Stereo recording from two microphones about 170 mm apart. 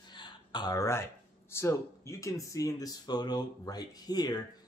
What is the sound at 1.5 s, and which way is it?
Speech, 15° left (ahead or behind).